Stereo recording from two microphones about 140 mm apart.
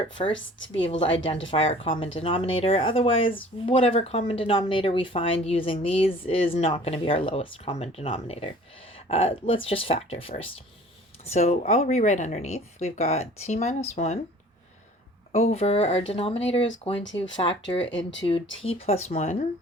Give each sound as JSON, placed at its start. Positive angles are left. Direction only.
{"t": 0.0, "sound": "speech", "side_deg": 40}
{"t": 11.3, "sound": "speech", "side_deg": 55}
{"t": 15.3, "sound": "speech", "side_deg": 50}